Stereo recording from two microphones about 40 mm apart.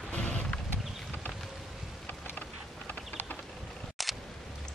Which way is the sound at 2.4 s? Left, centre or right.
Left.